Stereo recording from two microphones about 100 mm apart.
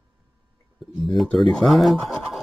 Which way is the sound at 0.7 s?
Centre (ahead or behind).